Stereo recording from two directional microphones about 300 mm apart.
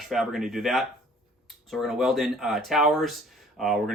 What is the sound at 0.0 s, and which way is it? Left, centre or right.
Speech, centre.